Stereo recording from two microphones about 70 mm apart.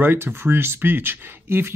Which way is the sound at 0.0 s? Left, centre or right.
Right.